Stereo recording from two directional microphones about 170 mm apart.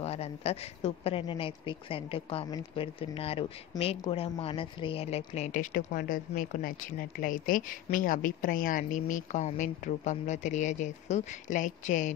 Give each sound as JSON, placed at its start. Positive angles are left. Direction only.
{"t": 0.0, "sound": "speech", "side_deg": 35}